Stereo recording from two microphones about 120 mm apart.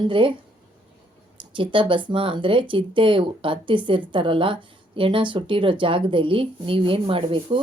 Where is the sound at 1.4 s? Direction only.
45° right (ahead or behind).